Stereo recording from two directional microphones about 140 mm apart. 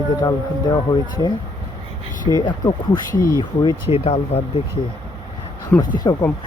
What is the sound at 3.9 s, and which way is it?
Speech, 45° left (ahead or behind).